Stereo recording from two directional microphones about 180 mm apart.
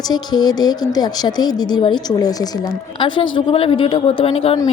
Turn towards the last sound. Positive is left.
turn(degrees=35)  # may be behind; listen again after turning